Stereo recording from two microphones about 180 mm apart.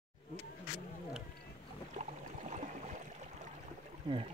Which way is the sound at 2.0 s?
40° right (ahead or behind).